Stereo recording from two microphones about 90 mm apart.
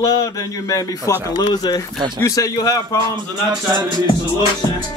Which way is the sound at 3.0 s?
60° right (ahead or behind).